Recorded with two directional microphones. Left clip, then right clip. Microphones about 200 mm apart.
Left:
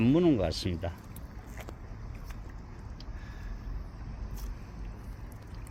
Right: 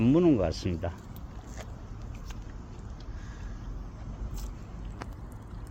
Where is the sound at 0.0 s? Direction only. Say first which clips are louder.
Right 2 dB; 10° left (ahead or behind).